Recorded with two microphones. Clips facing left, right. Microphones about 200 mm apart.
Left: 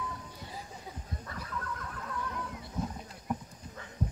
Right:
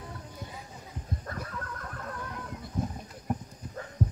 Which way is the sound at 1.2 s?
50° right (ahead or behind).